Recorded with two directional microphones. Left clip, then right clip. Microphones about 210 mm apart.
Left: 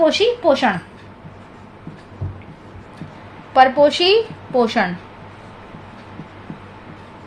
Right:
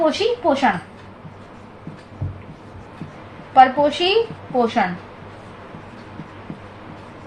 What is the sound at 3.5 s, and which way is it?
A woman's voice, 50° left (ahead or behind).